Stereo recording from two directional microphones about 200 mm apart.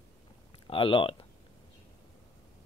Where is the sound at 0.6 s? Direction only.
25° left (ahead or behind).